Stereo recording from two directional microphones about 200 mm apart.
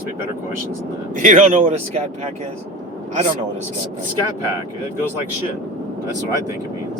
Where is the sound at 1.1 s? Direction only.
40° right (ahead or behind).